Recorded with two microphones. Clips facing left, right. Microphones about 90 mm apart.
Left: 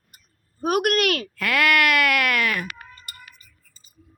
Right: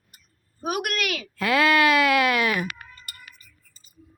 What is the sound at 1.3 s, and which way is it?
Speech, 25° right (ahead or behind).